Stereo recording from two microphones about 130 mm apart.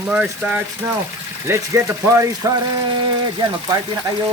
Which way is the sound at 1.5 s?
20° right (ahead or behind).